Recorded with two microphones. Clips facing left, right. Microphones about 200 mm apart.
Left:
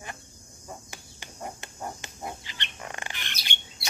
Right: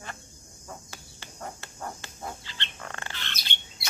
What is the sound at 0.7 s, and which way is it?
Chicken, 15° left (ahead or behind).